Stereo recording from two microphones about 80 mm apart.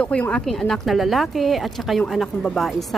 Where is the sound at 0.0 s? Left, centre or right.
Centre.